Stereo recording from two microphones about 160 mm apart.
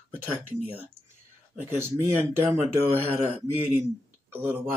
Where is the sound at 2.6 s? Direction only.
40° right (ahead or behind).